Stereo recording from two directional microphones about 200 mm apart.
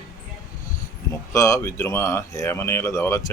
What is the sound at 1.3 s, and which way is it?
Speech, 15° left (ahead or behind).